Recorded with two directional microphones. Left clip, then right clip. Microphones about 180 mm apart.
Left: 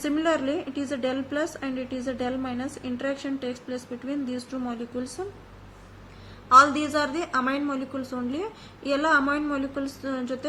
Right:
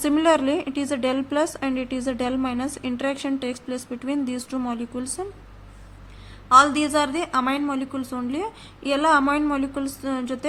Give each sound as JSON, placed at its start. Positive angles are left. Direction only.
{"t": 0.0, "sound": "a woman's voice", "side_deg": -55}
{"t": 6.5, "sound": "a woman's voice", "side_deg": -40}